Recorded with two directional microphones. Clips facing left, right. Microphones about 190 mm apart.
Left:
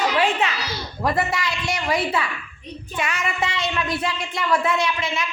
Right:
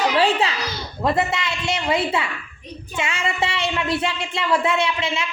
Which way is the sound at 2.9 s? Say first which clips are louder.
Right 1 dB; 25° right (ahead or behind).